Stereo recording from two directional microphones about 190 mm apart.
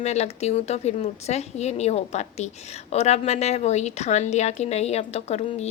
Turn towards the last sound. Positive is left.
turn(degrees=35)  # may be behind; listen again after turning